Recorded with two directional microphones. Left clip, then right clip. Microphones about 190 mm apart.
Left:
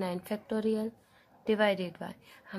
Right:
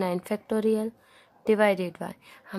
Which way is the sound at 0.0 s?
30° right (ahead or behind).